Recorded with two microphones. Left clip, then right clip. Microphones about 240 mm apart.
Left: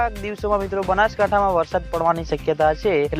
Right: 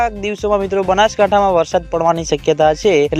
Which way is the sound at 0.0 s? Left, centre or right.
Right.